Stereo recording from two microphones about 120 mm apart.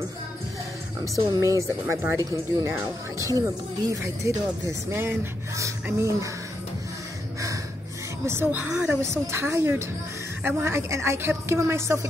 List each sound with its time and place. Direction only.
1.0 s speech: 25° right (ahead or behind)
8.3 s speech: 20° right (ahead or behind)